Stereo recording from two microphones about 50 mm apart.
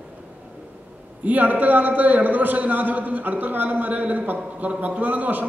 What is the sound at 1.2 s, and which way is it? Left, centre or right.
A man's voice, right.